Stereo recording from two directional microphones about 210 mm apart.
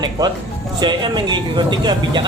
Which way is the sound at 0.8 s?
20° right (ahead or behind).